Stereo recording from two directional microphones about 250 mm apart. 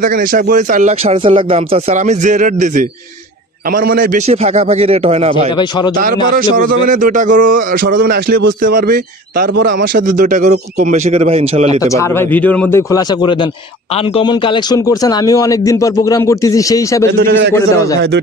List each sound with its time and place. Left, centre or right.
0.0 s a man's voice: right
11.8 s speech: centre
17.1 s a man's voice: right